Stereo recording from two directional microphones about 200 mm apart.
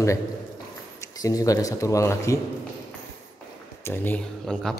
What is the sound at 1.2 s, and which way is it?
Speech, 15° left (ahead or behind).